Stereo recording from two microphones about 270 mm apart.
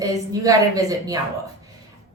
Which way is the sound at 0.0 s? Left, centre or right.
Centre.